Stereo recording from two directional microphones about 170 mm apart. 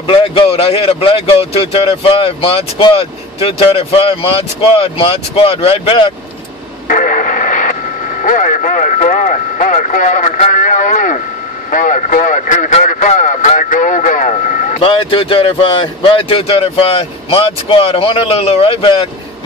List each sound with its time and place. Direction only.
0.0 s speech: 30° left (ahead or behind)
6.9 s radio: 50° left (ahead or behind)
8.2 s speech: 50° left (ahead or behind)
14.8 s speech: 30° left (ahead or behind)